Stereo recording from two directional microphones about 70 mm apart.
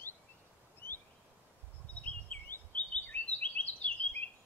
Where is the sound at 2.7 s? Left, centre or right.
Left.